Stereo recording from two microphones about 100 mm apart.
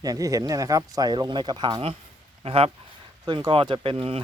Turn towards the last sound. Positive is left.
turn(degrees=-65)  # may be behind; listen again after turning